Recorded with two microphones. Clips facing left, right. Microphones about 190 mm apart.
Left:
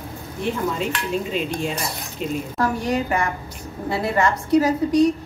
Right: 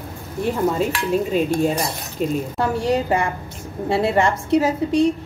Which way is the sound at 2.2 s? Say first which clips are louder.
Right 4 dB; 45° right (ahead or behind).